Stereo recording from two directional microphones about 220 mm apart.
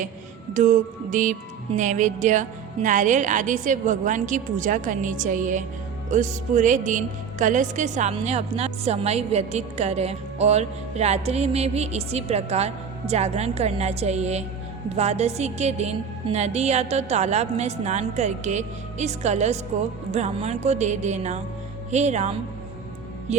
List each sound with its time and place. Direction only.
0.5 s music: 35° right (ahead or behind)
6.1 s speech: 35° right (ahead or behind)
14.9 s music: 30° right (ahead or behind)